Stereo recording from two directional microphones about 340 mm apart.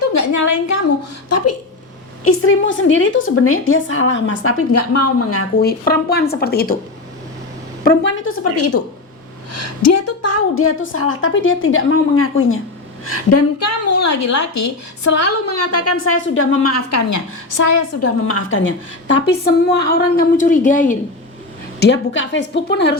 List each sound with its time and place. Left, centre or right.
0.1 s a woman's voice: left
1.3 s a sound: left
2.2 s a woman's voice: left
5.6 s a woman's voice: left
7.9 s a woman's voice: left
18.3 s a woman's voice: left